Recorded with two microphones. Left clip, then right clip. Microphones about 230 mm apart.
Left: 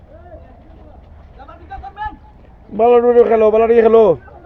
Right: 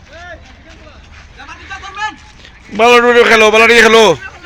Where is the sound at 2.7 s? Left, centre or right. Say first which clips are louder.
Right 4 dB; right.